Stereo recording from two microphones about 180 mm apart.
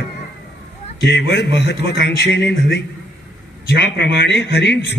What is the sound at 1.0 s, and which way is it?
A man's voice, 70° left (ahead or behind).